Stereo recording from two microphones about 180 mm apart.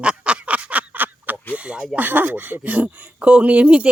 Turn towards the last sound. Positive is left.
turn(degrees=-5)  # may be behind; listen again after turning